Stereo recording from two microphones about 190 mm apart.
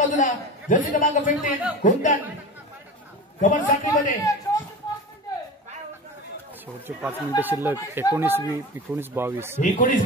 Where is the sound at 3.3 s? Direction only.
40° left (ahead or behind).